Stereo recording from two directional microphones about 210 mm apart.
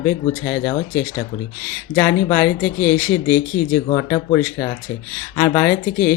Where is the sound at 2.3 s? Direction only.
10° left (ahead or behind).